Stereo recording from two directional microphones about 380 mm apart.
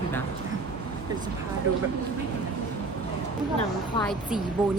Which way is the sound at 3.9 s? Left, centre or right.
Centre.